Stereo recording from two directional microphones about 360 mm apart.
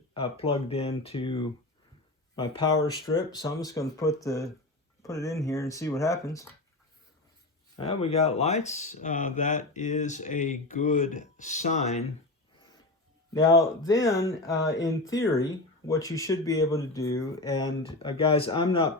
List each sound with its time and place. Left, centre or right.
0.1 s speech: centre
7.8 s speech: centre
13.3 s speech: centre